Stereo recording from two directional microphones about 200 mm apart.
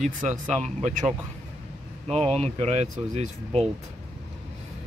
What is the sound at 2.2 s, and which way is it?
Speech, 30° right (ahead or behind).